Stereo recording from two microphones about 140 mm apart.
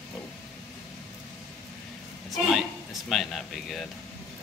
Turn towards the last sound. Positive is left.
turn(degrees=0)  # may be behind; listen again after turning